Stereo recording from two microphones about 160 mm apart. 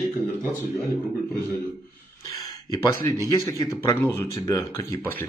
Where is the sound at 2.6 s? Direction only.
20° left (ahead or behind).